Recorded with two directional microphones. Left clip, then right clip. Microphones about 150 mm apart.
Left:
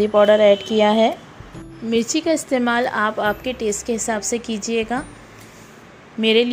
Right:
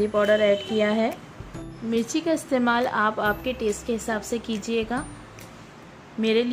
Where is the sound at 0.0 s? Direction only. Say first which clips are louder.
Left 7 dB; 25° left (ahead or behind).